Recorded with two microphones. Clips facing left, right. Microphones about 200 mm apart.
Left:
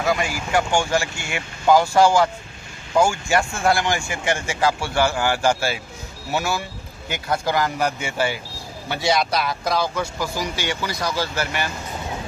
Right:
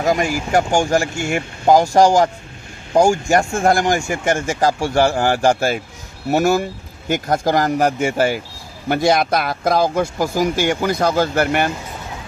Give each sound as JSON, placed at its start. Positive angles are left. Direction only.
{"t": 0.0, "sound": "speech", "side_deg": -45}